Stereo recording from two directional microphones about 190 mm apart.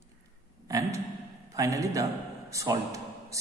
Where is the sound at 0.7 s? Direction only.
15° right (ahead or behind).